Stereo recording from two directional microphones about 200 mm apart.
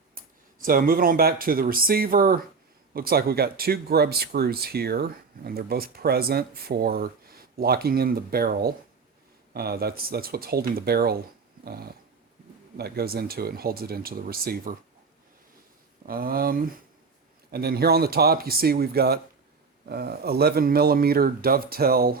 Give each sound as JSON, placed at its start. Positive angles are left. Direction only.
{"t": 0.6, "sound": "speech", "side_deg": -45}
{"t": 11.6, "sound": "dog", "side_deg": -50}
{"t": 12.7, "sound": "speech", "side_deg": -50}
{"t": 16.0, "sound": "speech", "side_deg": -45}